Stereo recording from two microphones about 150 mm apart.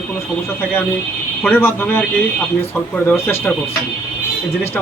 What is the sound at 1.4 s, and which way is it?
Speech, 15° left (ahead or behind).